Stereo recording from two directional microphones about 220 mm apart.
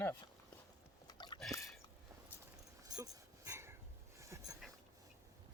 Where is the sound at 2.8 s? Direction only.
15° right (ahead or behind).